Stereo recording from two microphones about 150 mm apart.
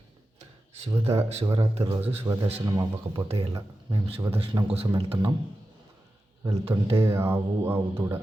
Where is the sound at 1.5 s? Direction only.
30° right (ahead or behind).